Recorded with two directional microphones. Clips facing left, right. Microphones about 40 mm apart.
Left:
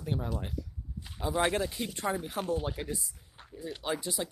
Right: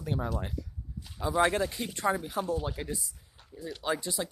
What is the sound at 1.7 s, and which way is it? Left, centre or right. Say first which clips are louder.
Speech: right 3 dB; right.